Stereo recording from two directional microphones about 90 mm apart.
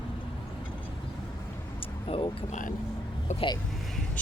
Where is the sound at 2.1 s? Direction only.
90° left.